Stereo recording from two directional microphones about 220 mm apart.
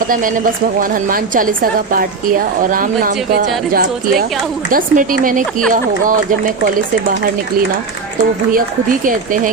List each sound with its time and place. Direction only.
0.1 s speech: 40° right (ahead or behind)
2.6 s speech: 35° right (ahead or behind)
9.0 s speech: 35° right (ahead or behind)